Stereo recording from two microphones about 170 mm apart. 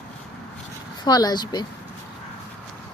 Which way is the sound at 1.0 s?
25° left (ahead or behind).